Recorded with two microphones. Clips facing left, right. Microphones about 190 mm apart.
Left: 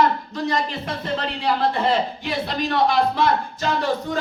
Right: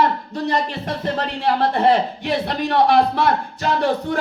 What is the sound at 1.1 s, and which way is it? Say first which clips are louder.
A man's voice: right 2 dB; 60° right (ahead or behind).